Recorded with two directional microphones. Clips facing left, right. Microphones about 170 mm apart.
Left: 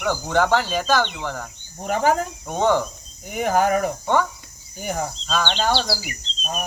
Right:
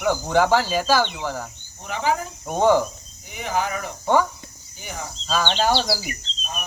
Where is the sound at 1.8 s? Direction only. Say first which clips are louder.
Left 4 dB; 50° left (ahead or behind).